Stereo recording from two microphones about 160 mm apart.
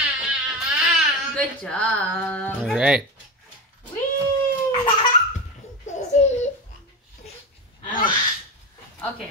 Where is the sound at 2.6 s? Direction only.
5° right (ahead or behind).